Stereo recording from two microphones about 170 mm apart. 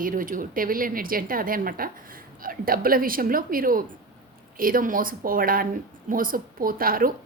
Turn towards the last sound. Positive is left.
turn(degrees=-55)  # may be behind; listen again after turning